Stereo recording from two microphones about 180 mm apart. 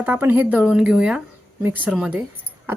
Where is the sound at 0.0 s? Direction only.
10° right (ahead or behind).